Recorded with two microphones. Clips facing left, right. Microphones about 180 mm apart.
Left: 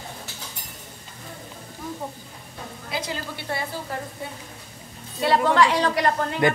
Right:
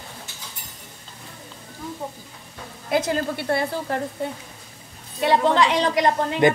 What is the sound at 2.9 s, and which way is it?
Speech, 55° right (ahead or behind).